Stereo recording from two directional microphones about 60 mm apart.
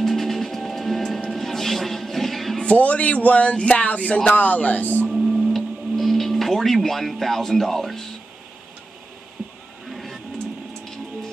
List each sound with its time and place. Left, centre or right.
0.0 s music: centre
2.6 s speech: left
5.1 s music: centre
9.8 s printer: centre